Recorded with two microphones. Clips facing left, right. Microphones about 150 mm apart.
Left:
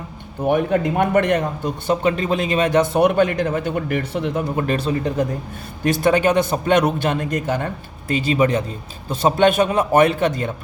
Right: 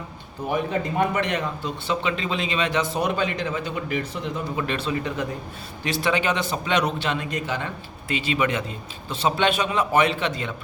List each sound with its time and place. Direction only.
0.4 s speech: 60° left (ahead or behind)
4.6 s speech: 40° left (ahead or behind)